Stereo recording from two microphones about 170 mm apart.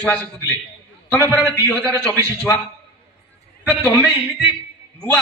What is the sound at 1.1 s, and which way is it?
A man's voice, 10° left (ahead or behind).